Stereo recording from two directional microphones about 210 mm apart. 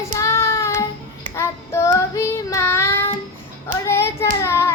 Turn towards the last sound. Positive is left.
turn(degrees=10)  # may be behind; listen again after turning